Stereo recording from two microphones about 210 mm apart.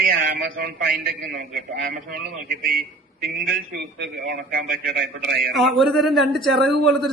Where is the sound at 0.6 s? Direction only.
45° right (ahead or behind).